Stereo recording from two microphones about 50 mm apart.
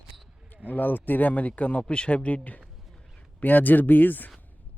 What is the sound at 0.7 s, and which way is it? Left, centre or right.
Speech, left.